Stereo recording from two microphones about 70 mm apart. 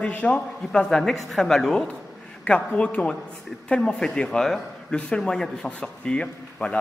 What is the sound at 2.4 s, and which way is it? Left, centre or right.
A man's voice, centre.